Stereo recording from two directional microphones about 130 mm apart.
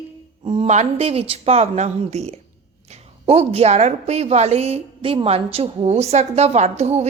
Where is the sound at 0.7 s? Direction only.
55° right (ahead or behind).